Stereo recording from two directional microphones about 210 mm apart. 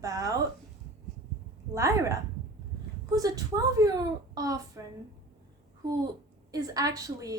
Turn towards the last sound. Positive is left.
turn(degrees=-15)  # may be behind; listen again after turning